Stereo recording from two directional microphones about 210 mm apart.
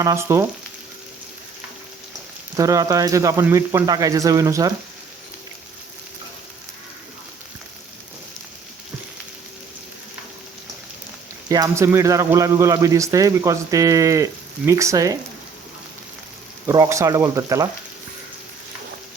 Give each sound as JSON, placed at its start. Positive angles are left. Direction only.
{"t": 0.0, "sound": "a man's voice", "side_deg": -15}
{"t": 2.6, "sound": "a man's voice", "side_deg": -15}
{"t": 11.4, "sound": "a man's voice", "side_deg": -15}
{"t": 16.6, "sound": "a man's voice", "side_deg": -15}